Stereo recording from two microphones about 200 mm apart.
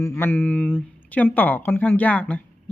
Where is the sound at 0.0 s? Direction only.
10° left (ahead or behind).